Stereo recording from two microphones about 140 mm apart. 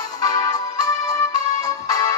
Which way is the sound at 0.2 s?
25° left (ahead or behind).